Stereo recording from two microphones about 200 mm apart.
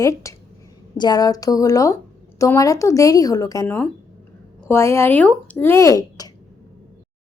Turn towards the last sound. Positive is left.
turn(degrees=15)  # may be behind; listen again after turning